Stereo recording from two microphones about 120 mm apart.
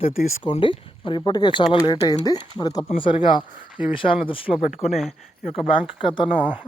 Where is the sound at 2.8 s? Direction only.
45° left (ahead or behind).